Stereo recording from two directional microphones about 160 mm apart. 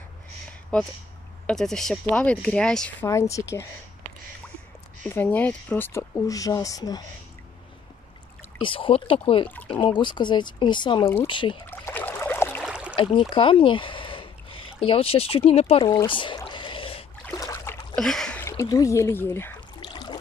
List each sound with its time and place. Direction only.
0.7 s speech: 5° left (ahead or behind)
3.1 s speech: 20° left (ahead or behind)
5.0 s speech: 10° left (ahead or behind)
8.5 s speech: 30° left (ahead or behind)
11.6 s rowboat: 15° left (ahead or behind)
12.6 s a sound: 5° right (ahead or behind)
12.9 s speech: 30° left (ahead or behind)
16.1 s a sound: 30° left (ahead or behind)
17.3 s boat: 20° left (ahead or behind)
17.9 s a sound: 5° left (ahead or behind)
18.4 s speech: 15° left (ahead or behind)
19.8 s a sound: 30° left (ahead or behind)